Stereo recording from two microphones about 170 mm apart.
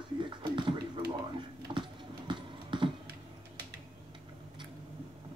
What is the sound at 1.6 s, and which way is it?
Typing, 30° right (ahead or behind).